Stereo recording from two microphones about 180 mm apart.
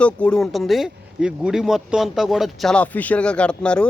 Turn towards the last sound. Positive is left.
turn(degrees=5)  # may be behind; listen again after turning